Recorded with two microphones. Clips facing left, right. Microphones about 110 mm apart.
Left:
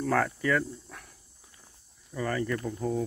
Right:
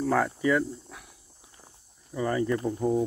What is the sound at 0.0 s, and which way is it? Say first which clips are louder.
Speech: right 2 dB; 10° right (ahead or behind).